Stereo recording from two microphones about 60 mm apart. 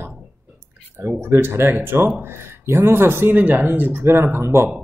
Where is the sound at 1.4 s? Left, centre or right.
Right.